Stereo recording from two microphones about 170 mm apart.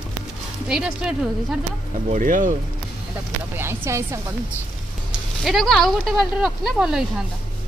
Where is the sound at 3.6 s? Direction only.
15° right (ahead or behind).